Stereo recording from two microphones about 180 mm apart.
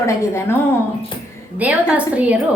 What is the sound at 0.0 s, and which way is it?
Speech, 15° left (ahead or behind).